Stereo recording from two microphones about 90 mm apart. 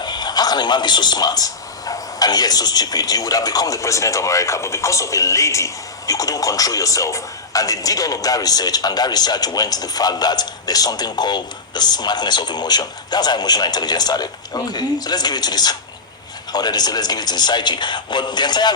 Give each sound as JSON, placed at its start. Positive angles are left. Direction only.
{"t": 0.0, "sound": "a man's voice", "side_deg": 50}